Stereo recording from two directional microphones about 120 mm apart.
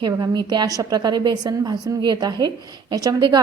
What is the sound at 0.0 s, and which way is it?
A woman's voice, 35° right (ahead or behind).